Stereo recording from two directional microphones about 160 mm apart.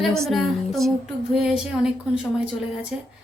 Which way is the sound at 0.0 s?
Centre (ahead or behind).